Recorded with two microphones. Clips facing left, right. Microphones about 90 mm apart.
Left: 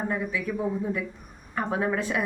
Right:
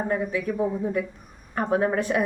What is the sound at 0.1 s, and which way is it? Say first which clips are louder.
Speech: right 4 dB; 45° right (ahead or behind).